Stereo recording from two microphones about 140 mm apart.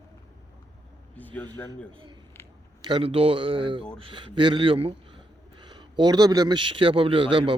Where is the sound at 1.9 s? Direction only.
35° right (ahead or behind).